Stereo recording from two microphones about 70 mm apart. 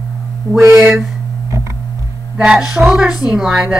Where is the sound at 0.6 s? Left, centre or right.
Right.